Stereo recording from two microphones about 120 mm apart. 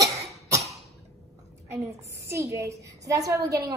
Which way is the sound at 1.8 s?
20° right (ahead or behind).